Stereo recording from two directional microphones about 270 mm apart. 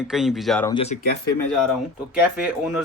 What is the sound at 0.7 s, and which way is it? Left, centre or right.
Speech, left.